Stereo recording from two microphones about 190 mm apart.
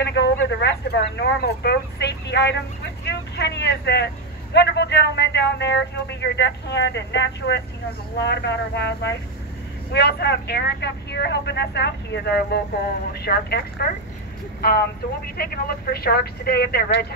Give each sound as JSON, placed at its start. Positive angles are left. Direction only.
{"t": 0.0, "sound": "a man's voice", "side_deg": 65}